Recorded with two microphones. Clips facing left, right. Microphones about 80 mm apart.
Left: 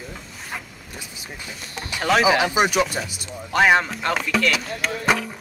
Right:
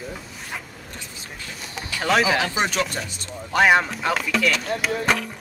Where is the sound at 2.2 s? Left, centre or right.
Centre.